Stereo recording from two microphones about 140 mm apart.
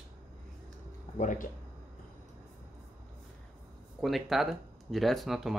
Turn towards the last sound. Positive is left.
turn(degrees=0)  # may be behind; listen again after turning